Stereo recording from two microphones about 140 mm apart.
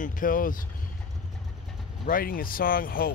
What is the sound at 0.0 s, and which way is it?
Speech, 80° left.